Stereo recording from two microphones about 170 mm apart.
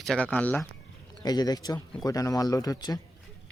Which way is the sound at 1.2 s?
25° left (ahead or behind).